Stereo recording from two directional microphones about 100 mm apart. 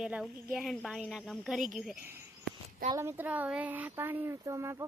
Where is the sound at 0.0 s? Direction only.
5° right (ahead or behind).